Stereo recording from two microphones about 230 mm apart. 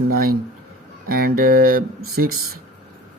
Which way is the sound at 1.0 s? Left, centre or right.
Right.